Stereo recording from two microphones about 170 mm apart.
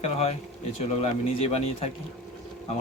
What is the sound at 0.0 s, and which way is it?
Speech, 35° left (ahead or behind).